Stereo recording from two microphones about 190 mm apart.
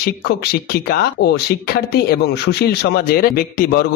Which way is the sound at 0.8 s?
55° left (ahead or behind).